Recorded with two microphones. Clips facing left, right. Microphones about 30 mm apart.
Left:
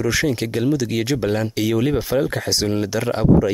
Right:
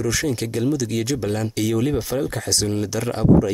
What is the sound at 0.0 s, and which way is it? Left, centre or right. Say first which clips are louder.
Speech: left 3 dB; centre.